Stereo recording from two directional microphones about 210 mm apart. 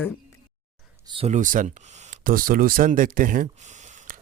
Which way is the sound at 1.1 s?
30° right (ahead or behind).